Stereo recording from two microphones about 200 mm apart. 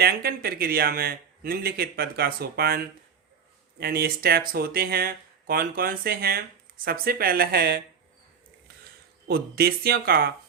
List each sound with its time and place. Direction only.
0.0 s a man's voice: 50° right (ahead or behind)
9.2 s a man's voice: 50° right (ahead or behind)